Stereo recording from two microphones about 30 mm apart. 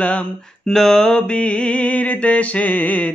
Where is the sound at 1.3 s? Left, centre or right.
Left.